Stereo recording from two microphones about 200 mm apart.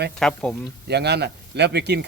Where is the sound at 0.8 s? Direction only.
55° right (ahead or behind).